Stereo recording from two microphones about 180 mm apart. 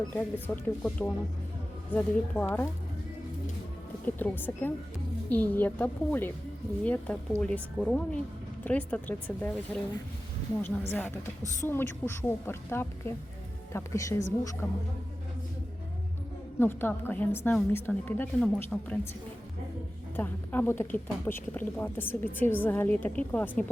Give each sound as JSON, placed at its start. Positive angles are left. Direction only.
{"t": 0.1, "sound": "speech", "side_deg": 10}
{"t": 4.0, "sound": "speech", "side_deg": 10}
{"t": 10.6, "sound": "speech", "side_deg": 10}
{"t": 16.6, "sound": "speech", "side_deg": 10}
{"t": 20.1, "sound": "speech", "side_deg": 10}